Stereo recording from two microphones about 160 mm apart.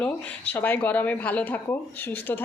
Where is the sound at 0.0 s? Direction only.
10° left (ahead or behind).